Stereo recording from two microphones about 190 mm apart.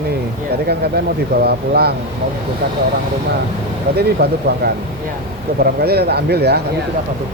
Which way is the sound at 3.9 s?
55° right (ahead or behind).